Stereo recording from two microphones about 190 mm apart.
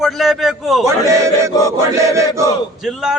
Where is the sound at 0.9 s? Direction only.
15° right (ahead or behind).